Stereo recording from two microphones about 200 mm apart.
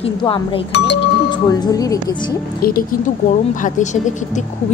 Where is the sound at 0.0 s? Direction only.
25° left (ahead or behind).